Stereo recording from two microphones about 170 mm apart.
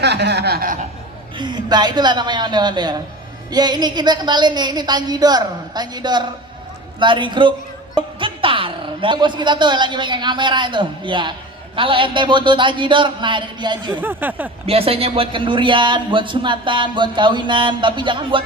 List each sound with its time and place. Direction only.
0.0 s snicker: 80° right; by 0.9 s 55° right (ahead or behind)
1.4 s speech: 25° right (ahead or behind)
13.9 s speech: 10° right (ahead or behind)
14.7 s speech: 35° right (ahead or behind)